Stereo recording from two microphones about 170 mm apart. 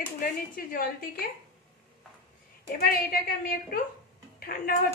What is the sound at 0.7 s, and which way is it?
Speech, 60° left (ahead or behind).